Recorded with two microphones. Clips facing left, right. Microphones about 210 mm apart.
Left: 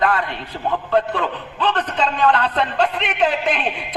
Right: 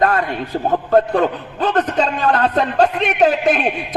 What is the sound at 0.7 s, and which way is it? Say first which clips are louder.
A man's voice: right 4 dB; 40° right (ahead or behind).